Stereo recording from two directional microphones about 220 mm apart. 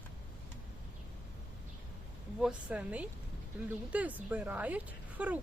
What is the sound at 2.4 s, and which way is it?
A woman's voice, 5° right (ahead or behind).